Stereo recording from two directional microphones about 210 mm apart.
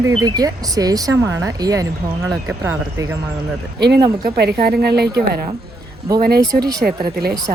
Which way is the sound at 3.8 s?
55° right (ahead or behind).